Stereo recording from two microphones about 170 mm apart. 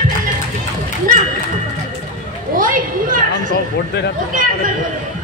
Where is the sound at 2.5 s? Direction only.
55° right (ahead or behind).